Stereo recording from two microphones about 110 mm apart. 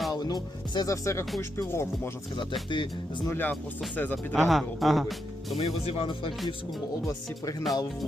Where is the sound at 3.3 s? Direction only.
15° left (ahead or behind).